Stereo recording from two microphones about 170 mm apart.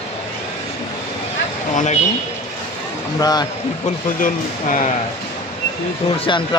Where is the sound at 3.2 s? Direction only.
25° left (ahead or behind).